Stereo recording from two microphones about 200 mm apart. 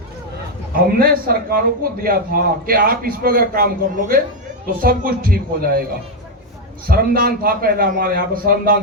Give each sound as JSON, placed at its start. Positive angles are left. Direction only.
{"t": 0.7, "sound": "a man's voice", "side_deg": -45}
{"t": 6.8, "sound": "a man's voice", "side_deg": -45}